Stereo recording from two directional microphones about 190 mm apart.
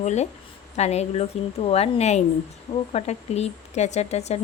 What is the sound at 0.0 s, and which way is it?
A woman's voice, 35° left (ahead or behind).